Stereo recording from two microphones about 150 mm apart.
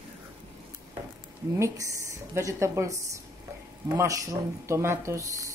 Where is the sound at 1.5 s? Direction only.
20° right (ahead or behind).